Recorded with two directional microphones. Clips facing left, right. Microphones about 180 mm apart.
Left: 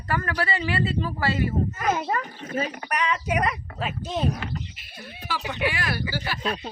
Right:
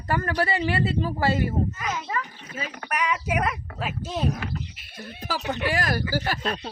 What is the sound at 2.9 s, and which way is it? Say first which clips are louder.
Speech: right 3 dB; 10° right (ahead or behind).